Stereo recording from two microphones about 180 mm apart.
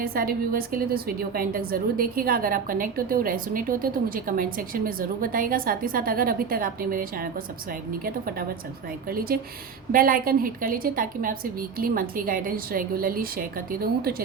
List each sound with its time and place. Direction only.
0.0 s a woman's voice: 55° right (ahead or behind)
9.0 s a woman's voice: 55° right (ahead or behind)